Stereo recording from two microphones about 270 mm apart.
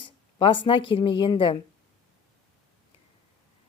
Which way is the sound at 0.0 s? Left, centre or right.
Centre.